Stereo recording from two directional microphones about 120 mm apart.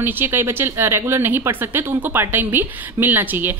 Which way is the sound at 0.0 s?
20° right (ahead or behind).